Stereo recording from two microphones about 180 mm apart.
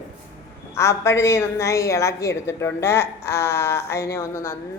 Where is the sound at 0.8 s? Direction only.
15° left (ahead or behind).